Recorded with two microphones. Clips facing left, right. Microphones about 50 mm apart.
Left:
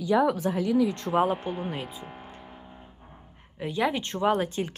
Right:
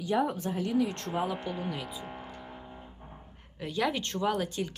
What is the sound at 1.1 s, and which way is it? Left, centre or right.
Speech, left.